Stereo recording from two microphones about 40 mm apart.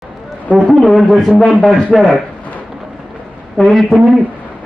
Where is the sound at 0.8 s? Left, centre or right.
Centre.